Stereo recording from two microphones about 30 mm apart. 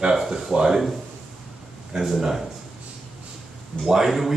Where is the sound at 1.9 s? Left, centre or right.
Centre.